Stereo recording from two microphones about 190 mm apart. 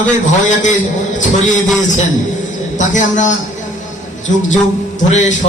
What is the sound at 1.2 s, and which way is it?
A man's voice, 40° left (ahead or behind).